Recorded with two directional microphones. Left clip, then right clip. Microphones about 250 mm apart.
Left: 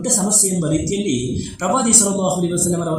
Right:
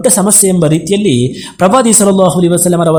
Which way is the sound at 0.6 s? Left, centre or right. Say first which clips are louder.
Right 9 dB; right.